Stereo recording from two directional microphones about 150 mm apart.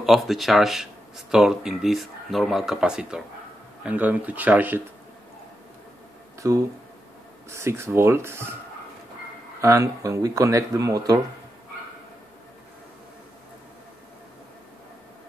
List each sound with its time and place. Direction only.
0.0 s speech: centre (ahead or behind)
7.4 s speech: 20° right (ahead or behind)
9.6 s speech: 20° right (ahead or behind)